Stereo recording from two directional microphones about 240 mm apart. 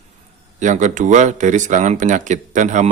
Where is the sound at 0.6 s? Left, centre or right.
Right.